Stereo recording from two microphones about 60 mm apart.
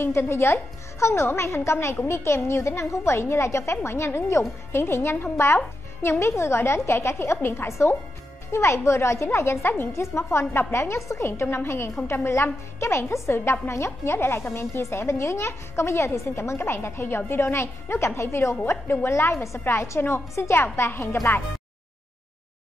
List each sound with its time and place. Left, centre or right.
0.0 s a woman's voice: left
11.4 s a woman's voice: left
20.5 s speech: left
20.9 s a woman's voice: left